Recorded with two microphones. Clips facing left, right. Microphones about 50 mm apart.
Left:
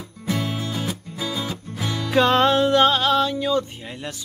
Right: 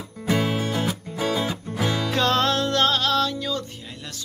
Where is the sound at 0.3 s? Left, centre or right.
Right.